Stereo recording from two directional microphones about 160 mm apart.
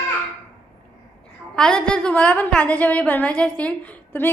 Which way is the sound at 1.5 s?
5° left (ahead or behind).